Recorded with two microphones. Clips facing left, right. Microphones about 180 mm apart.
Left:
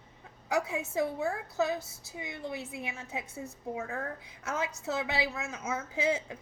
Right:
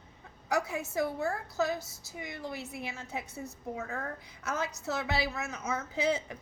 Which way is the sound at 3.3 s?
90° left.